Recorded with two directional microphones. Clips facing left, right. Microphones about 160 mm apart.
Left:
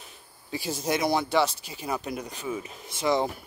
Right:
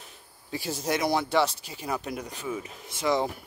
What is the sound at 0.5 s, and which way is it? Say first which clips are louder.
Speech: left 1 dB; 15° left (ahead or behind).